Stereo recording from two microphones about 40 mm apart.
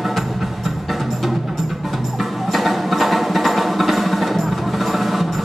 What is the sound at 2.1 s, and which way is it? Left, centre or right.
Music, centre.